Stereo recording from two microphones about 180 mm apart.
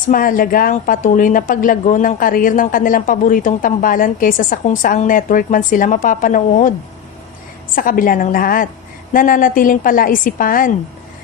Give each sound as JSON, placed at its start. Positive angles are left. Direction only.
{"t": 0.1, "sound": "a woman's voice", "side_deg": 50}
{"t": 7.8, "sound": "a woman's voice", "side_deg": 50}